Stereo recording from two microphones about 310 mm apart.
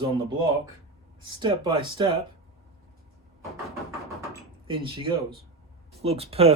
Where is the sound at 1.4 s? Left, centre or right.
Centre.